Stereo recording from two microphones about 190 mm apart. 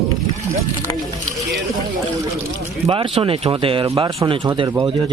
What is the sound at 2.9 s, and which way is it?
Speech, 25° right (ahead or behind).